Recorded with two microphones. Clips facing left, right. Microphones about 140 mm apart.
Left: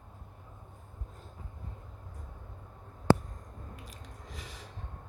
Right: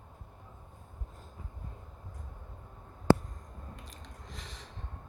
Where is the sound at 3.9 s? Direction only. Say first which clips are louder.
Left 1 dB; 5° left (ahead or behind).